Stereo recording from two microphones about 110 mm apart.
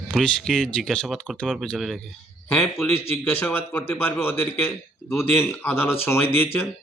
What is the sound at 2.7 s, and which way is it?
A man's voice, 20° left (ahead or behind).